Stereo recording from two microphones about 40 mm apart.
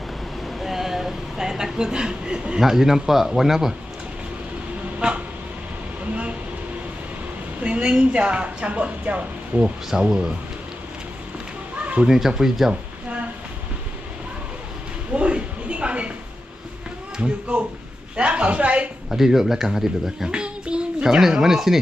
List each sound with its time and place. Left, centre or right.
0.6 s a sound: centre
2.6 s speech: centre
4.9 s a sound: right
7.6 s a woman's voice: right
9.6 s a woman's voice: right
12.0 s speech: centre
15.1 s a sound: right
17.5 s a woman's voice: right
19.1 s speech: centre
20.3 s babbling: right; by 21.8 s centre